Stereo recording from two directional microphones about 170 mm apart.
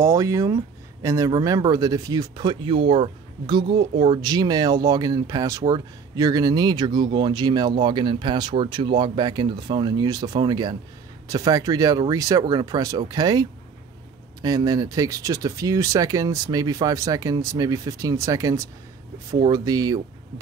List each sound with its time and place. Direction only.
0.0 s speech: 15° right (ahead or behind)